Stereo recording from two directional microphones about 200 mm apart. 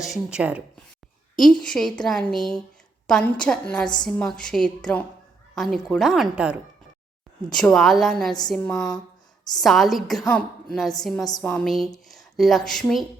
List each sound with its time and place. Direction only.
0.0 s a woman's voice: 5° right (ahead or behind)
8.7 s speech: 20° left (ahead or behind)
9.6 s a woman's voice: centre (ahead or behind)